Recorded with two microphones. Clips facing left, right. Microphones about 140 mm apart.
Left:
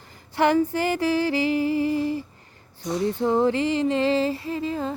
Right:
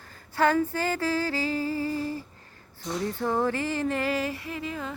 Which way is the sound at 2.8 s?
20° left (ahead or behind).